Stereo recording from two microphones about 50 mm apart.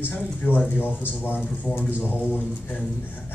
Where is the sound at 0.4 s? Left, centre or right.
Left.